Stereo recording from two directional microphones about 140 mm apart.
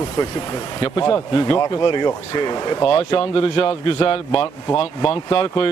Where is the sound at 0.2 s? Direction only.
30° left (ahead or behind).